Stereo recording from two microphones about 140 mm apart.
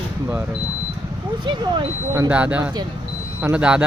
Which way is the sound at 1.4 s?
35° right (ahead or behind).